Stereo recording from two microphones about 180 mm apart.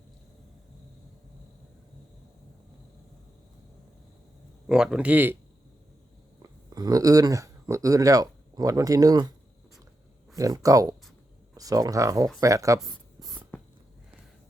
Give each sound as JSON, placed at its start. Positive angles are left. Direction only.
{"t": 4.6, "sound": "speech", "side_deg": -5}
{"t": 6.7, "sound": "speech", "side_deg": -20}
{"t": 10.3, "sound": "speech", "side_deg": -20}
{"t": 12.8, "sound": "writing", "side_deg": 0}